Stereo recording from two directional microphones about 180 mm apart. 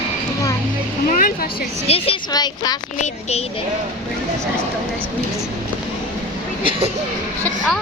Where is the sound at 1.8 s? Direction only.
30° left (ahead or behind).